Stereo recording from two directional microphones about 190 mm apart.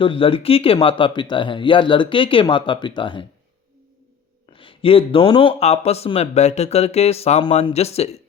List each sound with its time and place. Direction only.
0.0 s speech: 30° left (ahead or behind)
4.5 s speech: 30° left (ahead or behind)